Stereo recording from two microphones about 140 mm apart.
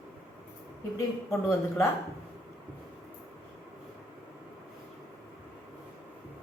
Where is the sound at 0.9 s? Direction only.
20° left (ahead or behind).